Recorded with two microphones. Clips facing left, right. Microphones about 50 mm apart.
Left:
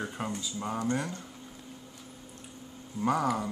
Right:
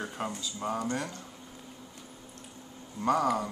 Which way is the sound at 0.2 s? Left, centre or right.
Centre.